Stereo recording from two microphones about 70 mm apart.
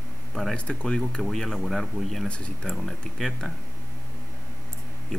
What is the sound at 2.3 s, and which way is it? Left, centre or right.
Speech, centre.